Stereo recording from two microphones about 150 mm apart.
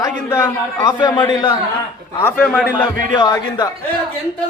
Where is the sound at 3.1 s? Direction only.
25° left (ahead or behind).